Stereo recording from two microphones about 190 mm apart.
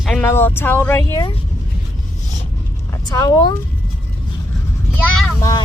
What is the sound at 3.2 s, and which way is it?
Speech, 20° left (ahead or behind).